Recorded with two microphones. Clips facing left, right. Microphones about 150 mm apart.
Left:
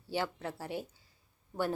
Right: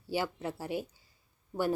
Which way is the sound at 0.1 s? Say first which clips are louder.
Right 2 dB; 10° right (ahead or behind).